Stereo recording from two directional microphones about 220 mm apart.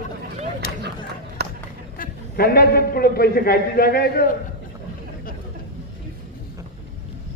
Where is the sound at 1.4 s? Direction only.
45° right (ahead or behind).